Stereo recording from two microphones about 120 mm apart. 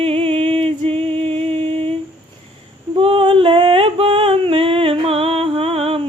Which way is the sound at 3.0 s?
50° right (ahead or behind).